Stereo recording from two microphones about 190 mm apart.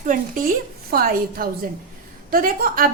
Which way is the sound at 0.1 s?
45° right (ahead or behind).